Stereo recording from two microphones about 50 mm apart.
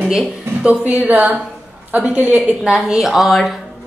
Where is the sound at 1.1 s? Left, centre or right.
Right.